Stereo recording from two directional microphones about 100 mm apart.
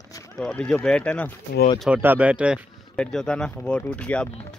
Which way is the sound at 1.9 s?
15° right (ahead or behind).